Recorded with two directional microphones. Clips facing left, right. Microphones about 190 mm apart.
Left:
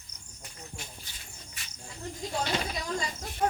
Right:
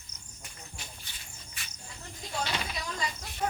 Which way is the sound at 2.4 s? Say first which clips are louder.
Left 2 dB; 40° left (ahead or behind).